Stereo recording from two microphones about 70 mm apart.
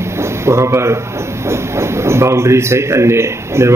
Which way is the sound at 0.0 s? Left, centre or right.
Right.